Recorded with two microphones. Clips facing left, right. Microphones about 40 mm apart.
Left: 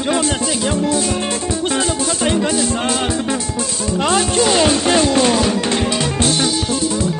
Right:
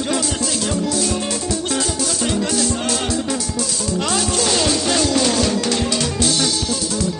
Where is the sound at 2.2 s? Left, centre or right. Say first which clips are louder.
Left 3 dB; left.